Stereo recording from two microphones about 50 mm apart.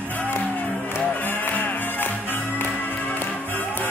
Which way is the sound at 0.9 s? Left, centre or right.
Left.